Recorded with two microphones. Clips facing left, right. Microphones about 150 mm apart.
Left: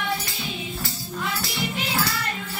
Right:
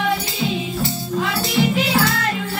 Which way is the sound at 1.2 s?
90° right.